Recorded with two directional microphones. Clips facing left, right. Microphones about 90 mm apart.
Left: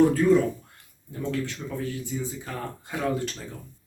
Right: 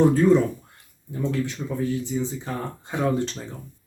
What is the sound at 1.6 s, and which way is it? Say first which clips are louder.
Speech: right 4 dB; 15° right (ahead or behind).